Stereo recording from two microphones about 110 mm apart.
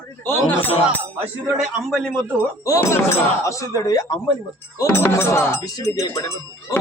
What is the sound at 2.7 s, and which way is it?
Speech, 30° left (ahead or behind).